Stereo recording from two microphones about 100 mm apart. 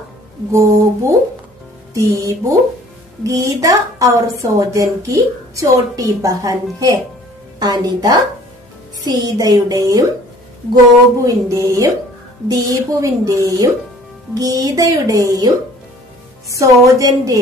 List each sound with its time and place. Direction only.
0.5 s a woman's voice: 30° right (ahead or behind)
11.2 s a woman's voice: 35° right (ahead or behind)